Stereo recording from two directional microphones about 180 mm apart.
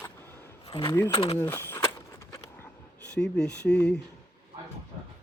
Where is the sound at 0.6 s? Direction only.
25° left (ahead or behind).